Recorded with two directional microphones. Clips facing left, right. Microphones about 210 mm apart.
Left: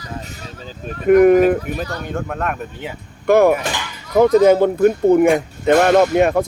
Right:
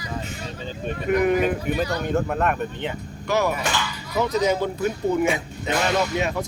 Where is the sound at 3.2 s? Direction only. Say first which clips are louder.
Left 10 dB; 55° left (ahead or behind).